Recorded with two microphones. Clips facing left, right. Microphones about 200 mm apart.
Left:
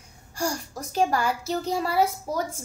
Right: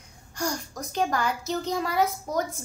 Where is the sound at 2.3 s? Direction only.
35° left (ahead or behind).